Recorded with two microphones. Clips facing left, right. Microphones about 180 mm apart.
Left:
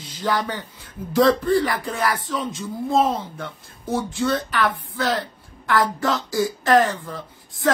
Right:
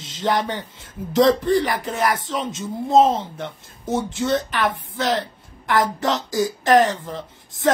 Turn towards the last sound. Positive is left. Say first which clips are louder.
# right 1 dB
turn(degrees=-20)  # may be behind; listen again after turning